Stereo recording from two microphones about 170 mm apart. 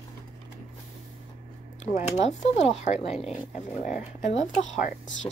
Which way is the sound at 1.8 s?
40° left (ahead or behind).